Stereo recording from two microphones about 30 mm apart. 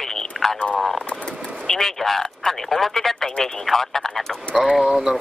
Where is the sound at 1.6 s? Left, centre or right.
Centre.